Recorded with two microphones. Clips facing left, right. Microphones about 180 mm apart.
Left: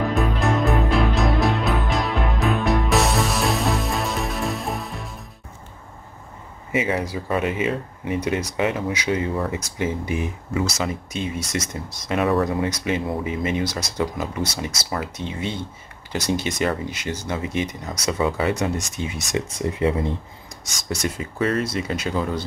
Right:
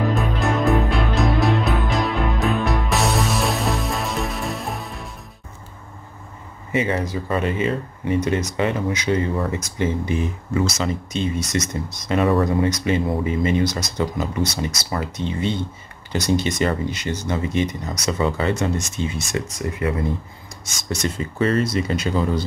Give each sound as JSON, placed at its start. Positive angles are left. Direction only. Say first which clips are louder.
{"t": 0.1, "sound": "music", "louder": "even", "side_deg": 0}
{"t": 6.7, "sound": "speech", "louder": "right 1 dB", "side_deg": 5}
{"t": 19.4, "sound": "speech", "louder": "left 2 dB", "side_deg": 25}
{"t": 21.0, "sound": "speech", "louder": "right 2 dB", "side_deg": 5}